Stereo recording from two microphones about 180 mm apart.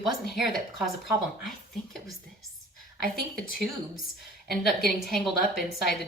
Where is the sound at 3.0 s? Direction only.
55° right (ahead or behind).